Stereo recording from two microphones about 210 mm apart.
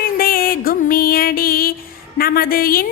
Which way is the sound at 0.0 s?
45° left (ahead or behind).